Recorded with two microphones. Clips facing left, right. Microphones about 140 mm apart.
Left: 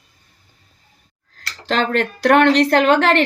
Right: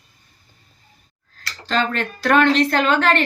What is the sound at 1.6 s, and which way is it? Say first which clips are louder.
A woman's voice: left 3 dB; 75° left (ahead or behind).